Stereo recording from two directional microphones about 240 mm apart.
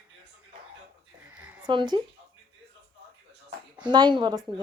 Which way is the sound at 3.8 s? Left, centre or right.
Centre.